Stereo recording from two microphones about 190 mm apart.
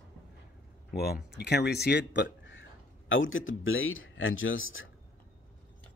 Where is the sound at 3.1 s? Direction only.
90° left.